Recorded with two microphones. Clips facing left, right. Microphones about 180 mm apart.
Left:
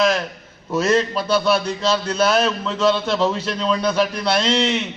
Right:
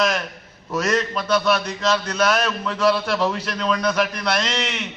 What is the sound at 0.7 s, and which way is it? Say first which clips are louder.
A man's voice: left 4 dB; 30° left (ahead or behind).